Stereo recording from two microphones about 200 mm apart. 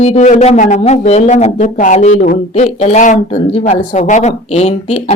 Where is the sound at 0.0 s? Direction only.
35° left (ahead or behind).